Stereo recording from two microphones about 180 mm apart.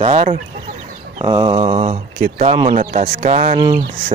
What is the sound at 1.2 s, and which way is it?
Speech, 25° right (ahead or behind).